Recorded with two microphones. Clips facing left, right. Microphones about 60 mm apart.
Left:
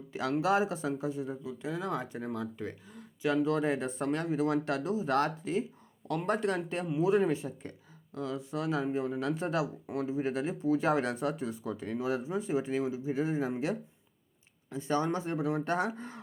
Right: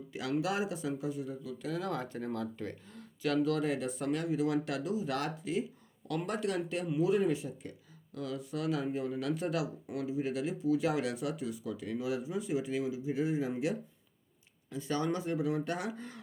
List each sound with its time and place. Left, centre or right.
0.1 s speech: left